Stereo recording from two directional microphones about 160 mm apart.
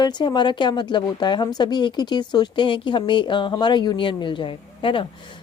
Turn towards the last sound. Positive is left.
turn(degrees=30)  # may be behind; listen again after turning